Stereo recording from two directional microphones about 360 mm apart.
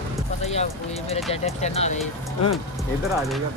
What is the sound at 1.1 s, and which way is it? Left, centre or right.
Speech, centre.